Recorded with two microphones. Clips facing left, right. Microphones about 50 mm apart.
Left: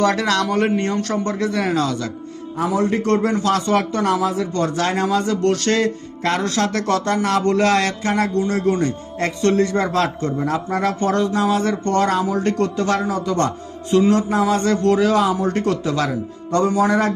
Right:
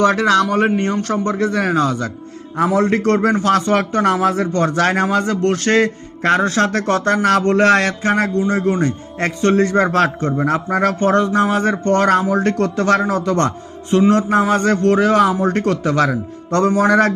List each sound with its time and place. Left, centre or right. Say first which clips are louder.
0.0 s a man's voice: right 4 dB; right
2.6 s a man's voice: right 4 dB; right
5.0 s a man's voice: right 1 dB; right
7.4 s a man's voice: right 3 dB; right
8.4 s a man's voice: right 2 dB; right
8.8 s a man's voice: right 2 dB; right